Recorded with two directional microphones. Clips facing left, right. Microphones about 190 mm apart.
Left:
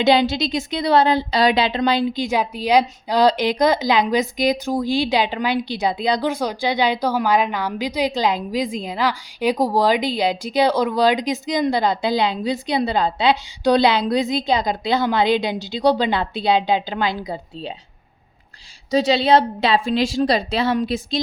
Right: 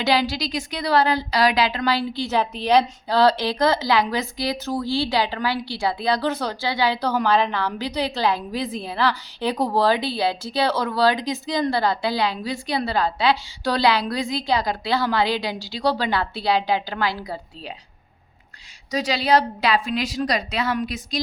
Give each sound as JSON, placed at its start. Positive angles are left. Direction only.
{"t": 0.0, "sound": "a woman's voice", "side_deg": 20}
{"t": 18.9, "sound": "a woman's voice", "side_deg": 25}